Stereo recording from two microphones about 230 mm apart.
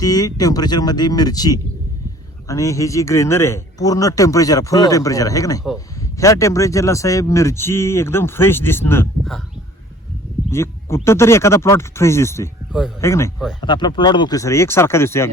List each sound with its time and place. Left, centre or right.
0.0 s speech: centre
10.5 s speech: centre